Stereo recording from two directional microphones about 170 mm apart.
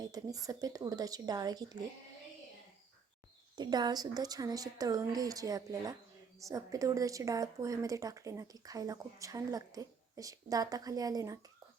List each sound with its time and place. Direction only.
0.0 s speech: 20° right (ahead or behind)
3.5 s speech: 25° right (ahead or behind)